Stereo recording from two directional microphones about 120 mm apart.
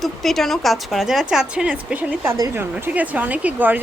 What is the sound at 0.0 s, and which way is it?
A woman's voice, centre (ahead or behind).